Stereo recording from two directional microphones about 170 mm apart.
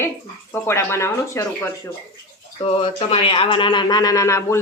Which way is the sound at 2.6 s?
35° left (ahead or behind).